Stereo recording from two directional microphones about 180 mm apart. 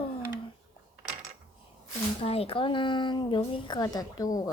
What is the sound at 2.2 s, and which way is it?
Speech, 35° left (ahead or behind).